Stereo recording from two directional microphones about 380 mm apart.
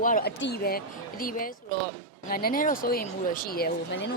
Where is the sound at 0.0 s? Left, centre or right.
Left.